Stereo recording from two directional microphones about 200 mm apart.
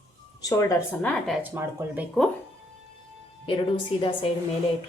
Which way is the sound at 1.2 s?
Centre (ahead or behind).